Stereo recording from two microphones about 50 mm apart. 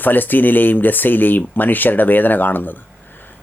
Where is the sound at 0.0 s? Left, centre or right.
Left.